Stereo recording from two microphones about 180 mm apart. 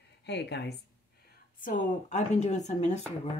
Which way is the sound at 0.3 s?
70° left (ahead or behind).